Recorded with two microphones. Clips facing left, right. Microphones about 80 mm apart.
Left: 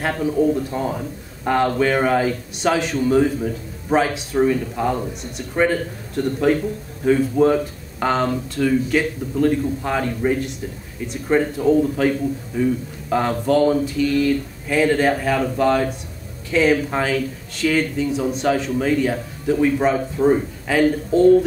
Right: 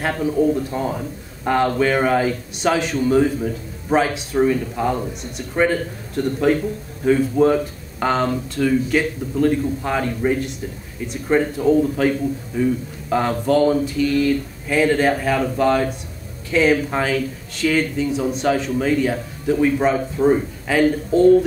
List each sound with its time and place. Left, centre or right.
0.0 s speech: centre
7.1 s speech: centre